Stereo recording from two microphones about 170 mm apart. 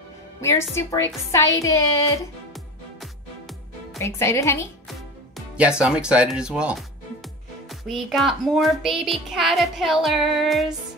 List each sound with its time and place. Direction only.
0.4 s a woman's voice: 15° left (ahead or behind)
4.0 s a woman's voice: 15° left (ahead or behind)
5.6 s a child's voice: 5° right (ahead or behind)
7.9 s a child's voice: centre (ahead or behind)